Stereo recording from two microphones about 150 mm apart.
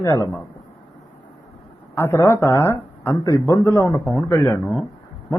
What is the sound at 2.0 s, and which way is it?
Speech, 20° left (ahead or behind).